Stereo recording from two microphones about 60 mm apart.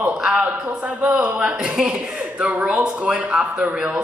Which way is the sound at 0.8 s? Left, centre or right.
Right.